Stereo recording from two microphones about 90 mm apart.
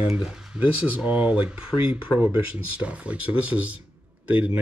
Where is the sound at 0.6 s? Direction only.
15° right (ahead or behind).